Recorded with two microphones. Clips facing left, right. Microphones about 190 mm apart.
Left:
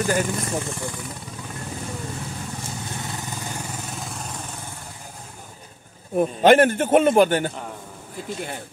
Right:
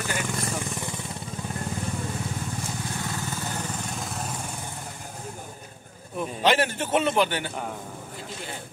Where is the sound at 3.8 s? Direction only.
Centre (ahead or behind).